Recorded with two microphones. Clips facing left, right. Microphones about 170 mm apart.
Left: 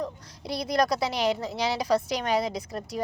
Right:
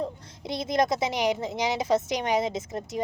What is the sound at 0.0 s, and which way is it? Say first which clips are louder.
A woman's voice: right 1 dB; 20° right (ahead or behind).